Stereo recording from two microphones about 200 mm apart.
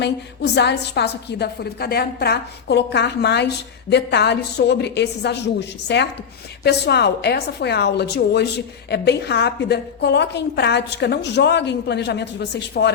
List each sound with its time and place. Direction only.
0.0 s a woman's voice: 60° left (ahead or behind)